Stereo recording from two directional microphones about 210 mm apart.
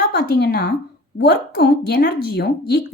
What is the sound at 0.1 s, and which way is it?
A woman's voice, 50° left (ahead or behind).